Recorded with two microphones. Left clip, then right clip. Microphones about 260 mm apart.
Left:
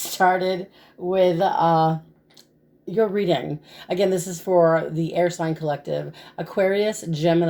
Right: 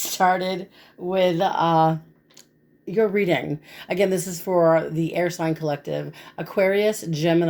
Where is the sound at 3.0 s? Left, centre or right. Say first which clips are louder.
Even; right.